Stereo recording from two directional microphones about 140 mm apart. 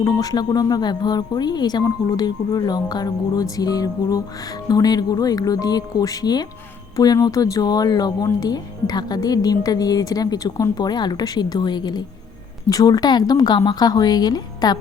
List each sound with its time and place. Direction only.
0.0 s speech: 25° left (ahead or behind)